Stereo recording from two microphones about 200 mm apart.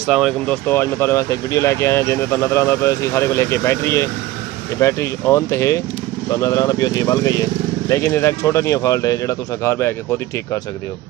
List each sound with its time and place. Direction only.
0.0 s speech: centre (ahead or behind)
0.7 s speech: 10° left (ahead or behind)